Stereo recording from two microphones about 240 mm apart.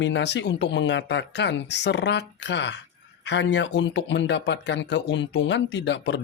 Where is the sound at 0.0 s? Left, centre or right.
Left.